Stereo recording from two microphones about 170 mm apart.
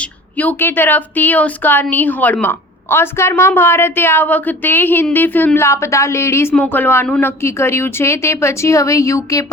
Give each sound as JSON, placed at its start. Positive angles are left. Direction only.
{"t": 0.0, "sound": "a woman's voice", "side_deg": 10}